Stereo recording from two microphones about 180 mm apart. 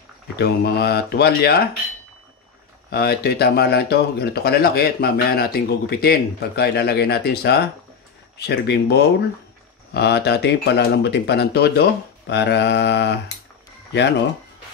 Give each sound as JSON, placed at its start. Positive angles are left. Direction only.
{"t": 0.4, "sound": "speech", "side_deg": 65}
{"t": 2.9, "sound": "speech", "side_deg": 60}